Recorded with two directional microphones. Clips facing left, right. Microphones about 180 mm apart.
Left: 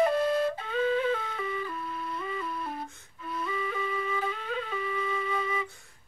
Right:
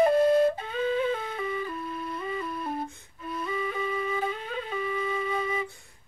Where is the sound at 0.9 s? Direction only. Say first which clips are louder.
Right 1 dB; 25° right (ahead or behind).